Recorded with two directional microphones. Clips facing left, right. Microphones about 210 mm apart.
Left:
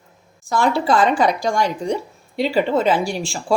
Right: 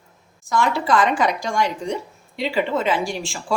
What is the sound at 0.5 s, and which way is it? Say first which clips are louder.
Speech: left 2 dB; 30° left (ahead or behind).